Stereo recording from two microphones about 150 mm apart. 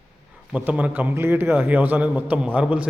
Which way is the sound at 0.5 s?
10° right (ahead or behind).